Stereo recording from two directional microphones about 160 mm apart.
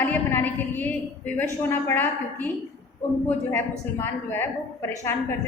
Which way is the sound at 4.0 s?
15° left (ahead or behind).